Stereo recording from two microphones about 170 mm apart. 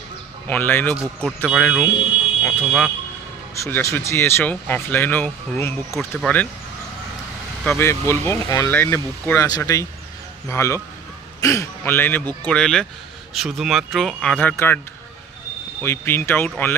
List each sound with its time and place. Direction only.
0.5 s speech: 10° left (ahead or behind)
0.9 s speech: centre (ahead or behind)
3.5 s speech: 15° left (ahead or behind)
7.7 s speech: 15° left (ahead or behind)
15.8 s speech: 15° left (ahead or behind)